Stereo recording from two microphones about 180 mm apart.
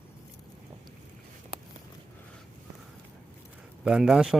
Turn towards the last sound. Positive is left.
turn(degrees=-5)  # may be behind; listen again after turning